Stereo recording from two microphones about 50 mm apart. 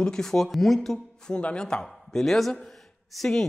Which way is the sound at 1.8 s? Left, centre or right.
Centre.